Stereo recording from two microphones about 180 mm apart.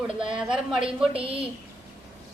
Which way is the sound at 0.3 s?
5° right (ahead or behind).